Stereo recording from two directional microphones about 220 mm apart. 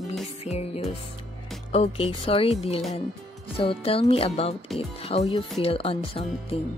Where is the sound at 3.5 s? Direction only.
25° left (ahead or behind).